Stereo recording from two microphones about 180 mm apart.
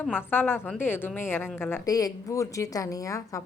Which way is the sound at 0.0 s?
10° left (ahead or behind).